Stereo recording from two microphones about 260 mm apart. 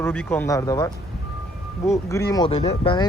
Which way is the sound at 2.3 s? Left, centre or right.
Centre.